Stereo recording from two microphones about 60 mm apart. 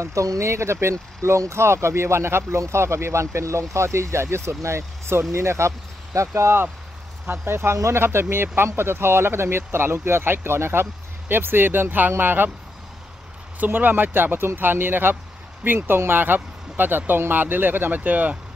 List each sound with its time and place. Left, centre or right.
0.0 s speech: right
13.6 s speech: right